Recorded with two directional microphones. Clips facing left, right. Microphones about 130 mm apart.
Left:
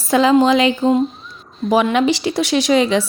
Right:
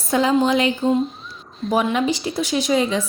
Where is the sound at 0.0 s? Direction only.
90° left.